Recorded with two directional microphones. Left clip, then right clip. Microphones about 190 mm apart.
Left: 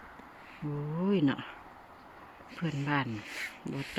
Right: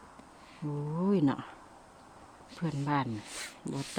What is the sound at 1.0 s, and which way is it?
Speech, 15° right (ahead or behind).